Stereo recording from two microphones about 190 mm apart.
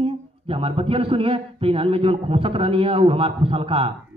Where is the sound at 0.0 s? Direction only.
30° right (ahead or behind).